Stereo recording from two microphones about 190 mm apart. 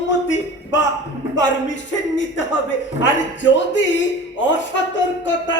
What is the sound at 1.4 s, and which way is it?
A man's voice, 75° left (ahead or behind).